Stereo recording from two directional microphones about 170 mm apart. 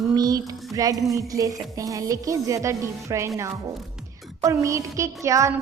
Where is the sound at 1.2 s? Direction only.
20° right (ahead or behind).